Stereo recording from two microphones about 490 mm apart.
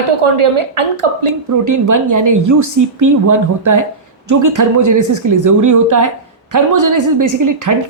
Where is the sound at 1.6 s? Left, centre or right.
Right.